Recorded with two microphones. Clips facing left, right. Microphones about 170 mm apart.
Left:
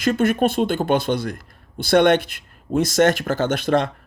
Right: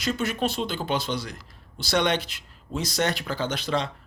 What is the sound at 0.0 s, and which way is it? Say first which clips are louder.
Speech: left 8 dB; 55° left (ahead or behind).